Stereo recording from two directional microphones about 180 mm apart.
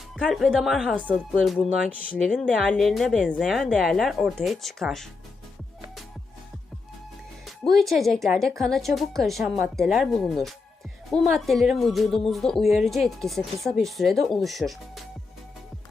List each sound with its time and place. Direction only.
0.3 s speech: centre (ahead or behind)
2.4 s speech: 5° left (ahead or behind)
7.4 s speech: centre (ahead or behind)